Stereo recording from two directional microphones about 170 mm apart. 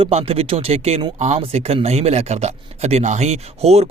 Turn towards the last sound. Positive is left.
turn(degrees=-35)  # may be behind; listen again after turning